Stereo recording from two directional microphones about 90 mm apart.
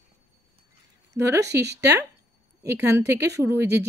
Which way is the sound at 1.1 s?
35° right (ahead or behind).